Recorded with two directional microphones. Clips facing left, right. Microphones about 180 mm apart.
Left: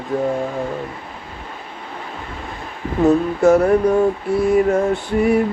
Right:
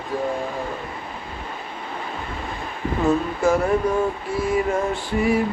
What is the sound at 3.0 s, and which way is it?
Speech, 70° left (ahead or behind).